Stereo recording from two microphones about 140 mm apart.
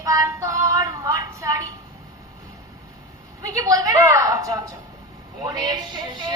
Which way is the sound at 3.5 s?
25° right (ahead or behind).